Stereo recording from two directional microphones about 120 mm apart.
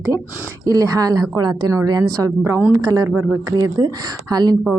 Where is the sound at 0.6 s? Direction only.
30° right (ahead or behind).